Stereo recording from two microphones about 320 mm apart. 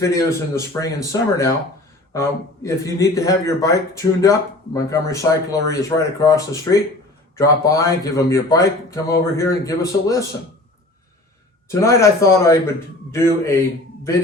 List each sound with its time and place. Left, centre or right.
0.0 s a man's voice: centre
2.6 s a man's voice: centre
11.7 s a man's voice: centre